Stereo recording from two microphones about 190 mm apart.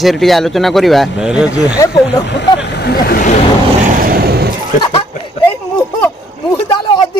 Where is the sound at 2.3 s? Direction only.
60° left (ahead or behind).